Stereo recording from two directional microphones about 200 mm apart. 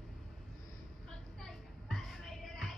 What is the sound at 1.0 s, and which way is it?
Music, centre (ahead or behind).